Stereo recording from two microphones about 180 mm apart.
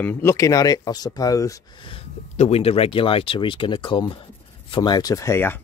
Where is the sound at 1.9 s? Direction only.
35° left (ahead or behind).